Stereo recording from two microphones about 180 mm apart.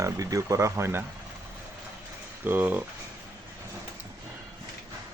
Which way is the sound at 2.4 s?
10° right (ahead or behind).